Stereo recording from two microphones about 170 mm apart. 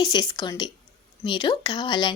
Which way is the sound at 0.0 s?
25° left (ahead or behind).